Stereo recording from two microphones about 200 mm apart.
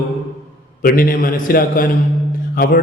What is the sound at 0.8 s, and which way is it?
A man's voice, 45° left (ahead or behind).